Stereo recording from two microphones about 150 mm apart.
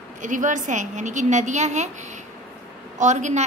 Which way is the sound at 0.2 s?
55° right (ahead or behind).